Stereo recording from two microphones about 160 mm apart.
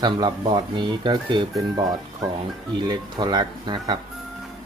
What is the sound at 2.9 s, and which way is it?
Speech, 25° right (ahead or behind).